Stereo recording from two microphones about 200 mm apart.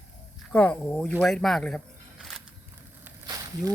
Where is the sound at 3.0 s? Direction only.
15° right (ahead or behind).